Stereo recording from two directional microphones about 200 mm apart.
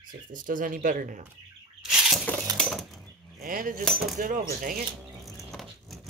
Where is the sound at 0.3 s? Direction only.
40° right (ahead or behind).